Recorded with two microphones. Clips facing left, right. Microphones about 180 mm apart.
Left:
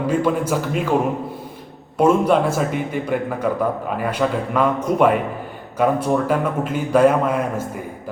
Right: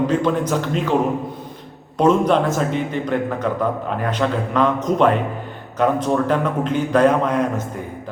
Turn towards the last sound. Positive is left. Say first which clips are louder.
# left 1 dB
turn(degrees=5)  # may be behind; listen again after turning